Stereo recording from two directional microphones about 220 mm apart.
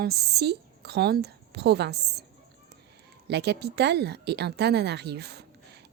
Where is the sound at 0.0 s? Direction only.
45° right (ahead or behind).